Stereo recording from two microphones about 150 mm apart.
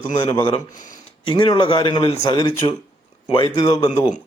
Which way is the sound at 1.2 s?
30° left (ahead or behind).